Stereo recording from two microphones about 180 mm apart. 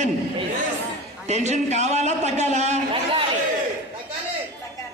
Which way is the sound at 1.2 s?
40° right (ahead or behind).